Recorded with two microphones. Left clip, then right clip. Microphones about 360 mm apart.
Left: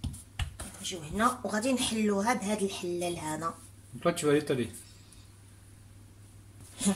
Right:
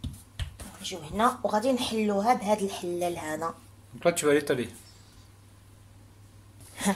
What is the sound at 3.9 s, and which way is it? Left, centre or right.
Speech, centre.